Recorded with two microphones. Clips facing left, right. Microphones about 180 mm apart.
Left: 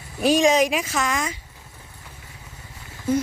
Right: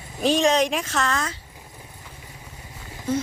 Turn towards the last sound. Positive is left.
turn(degrees=-15)  # may be behind; listen again after turning